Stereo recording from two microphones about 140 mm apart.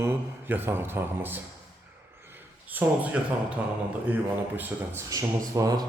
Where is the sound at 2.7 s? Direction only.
10° right (ahead or behind).